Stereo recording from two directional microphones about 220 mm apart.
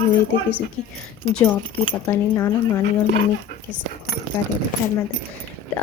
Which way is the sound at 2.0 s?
15° left (ahead or behind).